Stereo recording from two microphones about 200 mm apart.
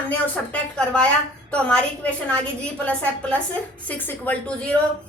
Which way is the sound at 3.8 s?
10° left (ahead or behind).